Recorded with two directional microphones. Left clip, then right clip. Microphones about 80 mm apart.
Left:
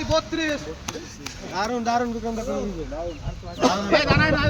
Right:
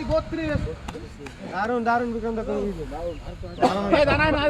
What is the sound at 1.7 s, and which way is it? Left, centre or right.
Speech, right.